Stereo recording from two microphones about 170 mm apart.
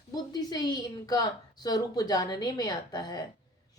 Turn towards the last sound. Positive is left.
turn(degrees=25)  # may be behind; listen again after turning